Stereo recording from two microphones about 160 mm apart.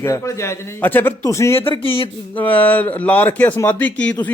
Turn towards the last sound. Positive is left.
turn(degrees=10)  # may be behind; listen again after turning